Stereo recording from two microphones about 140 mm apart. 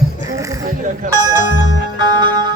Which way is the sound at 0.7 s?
70° right (ahead or behind).